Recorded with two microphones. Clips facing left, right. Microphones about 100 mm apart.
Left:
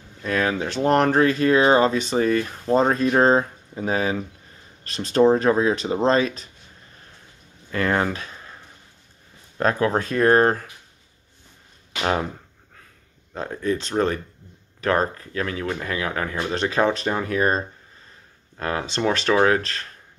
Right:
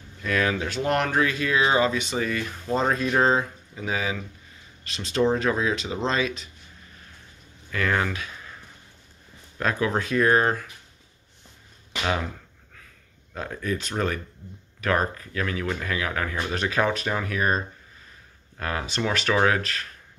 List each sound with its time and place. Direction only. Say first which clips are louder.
0.2 s speech: left 2 dB; 30° left (ahead or behind)
7.7 s speech: left 3 dB; 35° left (ahead or behind)
9.6 s speech: left 4 dB; 40° left (ahead or behind)
12.0 s speech: left 4 dB; 35° left (ahead or behind)
13.3 s speech: left 4 dB; 25° left (ahead or behind)